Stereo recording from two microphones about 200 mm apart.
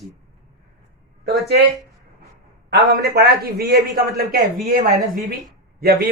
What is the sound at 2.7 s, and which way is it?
Speech, 55° right (ahead or behind).